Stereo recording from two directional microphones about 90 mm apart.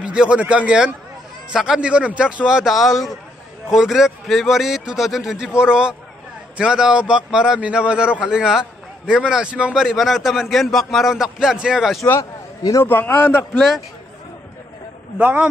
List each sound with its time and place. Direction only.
0.0 s a man's voice: 10° right (ahead or behind)
12.0 s a man's voice: 35° left (ahead or behind)
12.8 s a man's voice: 20° left (ahead or behind)
15.1 s a man's voice: 15° right (ahead or behind)